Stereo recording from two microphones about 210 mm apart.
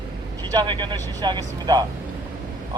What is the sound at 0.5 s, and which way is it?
Speech, 20° right (ahead or behind).